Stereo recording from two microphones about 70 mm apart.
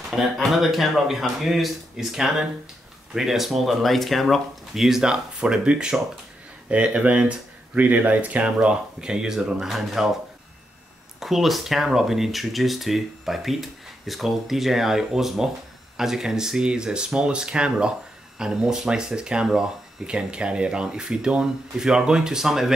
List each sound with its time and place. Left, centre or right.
0.1 s speech: centre
11.1 s speech: centre